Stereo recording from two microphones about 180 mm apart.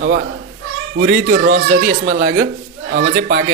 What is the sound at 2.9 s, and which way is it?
Speech, 65° right (ahead or behind).